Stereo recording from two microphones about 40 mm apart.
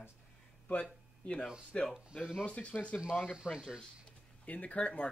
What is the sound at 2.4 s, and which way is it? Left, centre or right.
Speech, left.